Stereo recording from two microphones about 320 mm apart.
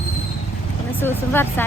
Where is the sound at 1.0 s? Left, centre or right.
Centre.